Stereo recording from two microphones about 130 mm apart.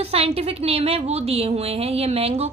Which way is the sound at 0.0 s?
50° right (ahead or behind).